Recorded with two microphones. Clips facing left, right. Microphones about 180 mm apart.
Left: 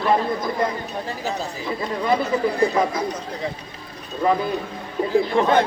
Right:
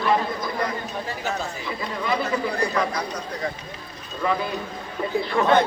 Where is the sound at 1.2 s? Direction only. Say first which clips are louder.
Left 3 dB; 40° left (ahead or behind).